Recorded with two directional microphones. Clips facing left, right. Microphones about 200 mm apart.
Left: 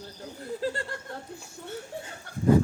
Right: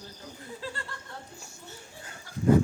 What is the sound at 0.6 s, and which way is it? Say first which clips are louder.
Chuckle: left 9 dB; 50° left (ahead or behind).